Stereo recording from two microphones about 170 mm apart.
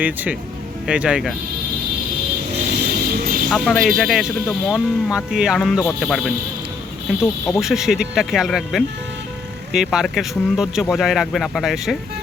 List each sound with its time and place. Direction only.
0.0 s speech: 10° right (ahead or behind)
2.7 s vehicle: 65° right (ahead or behind)
3.5 s speech: centre (ahead or behind)
7.4 s speech: centre (ahead or behind)